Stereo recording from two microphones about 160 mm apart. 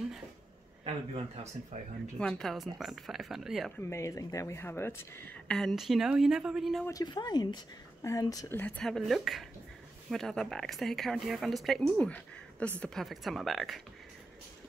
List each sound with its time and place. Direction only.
0.8 s speech: 40° right (ahead or behind)
2.1 s speech: 5° left (ahead or behind)
3.9 s speech: 20° left (ahead or behind); by 6.9 s centre (ahead or behind)
6.9 s speech: 25° left (ahead or behind)
8.5 s speech: 10° left (ahead or behind)